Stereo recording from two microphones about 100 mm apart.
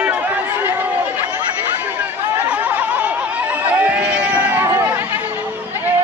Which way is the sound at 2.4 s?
15° right (ahead or behind).